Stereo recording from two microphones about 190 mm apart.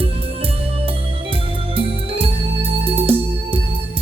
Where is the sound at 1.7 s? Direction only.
30° right (ahead or behind).